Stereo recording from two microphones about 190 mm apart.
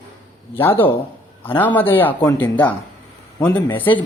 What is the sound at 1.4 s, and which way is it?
Speech, 10° left (ahead or behind).